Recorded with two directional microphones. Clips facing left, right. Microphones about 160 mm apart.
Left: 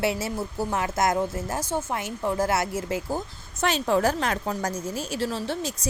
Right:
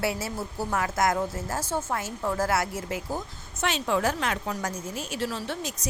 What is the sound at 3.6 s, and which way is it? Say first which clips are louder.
A woman's voice: left 3 dB; 40° left (ahead or behind).